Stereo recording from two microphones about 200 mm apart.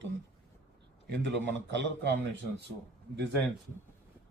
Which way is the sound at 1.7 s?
60° right (ahead or behind).